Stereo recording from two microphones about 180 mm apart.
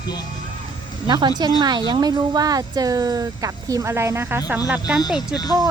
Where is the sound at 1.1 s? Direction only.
25° right (ahead or behind).